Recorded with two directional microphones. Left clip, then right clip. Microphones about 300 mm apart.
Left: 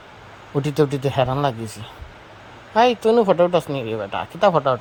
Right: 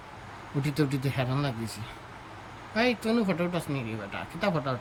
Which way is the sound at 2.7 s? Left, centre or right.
Centre.